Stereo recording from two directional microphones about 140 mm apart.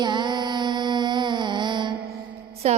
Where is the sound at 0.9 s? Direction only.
30° right (ahead or behind).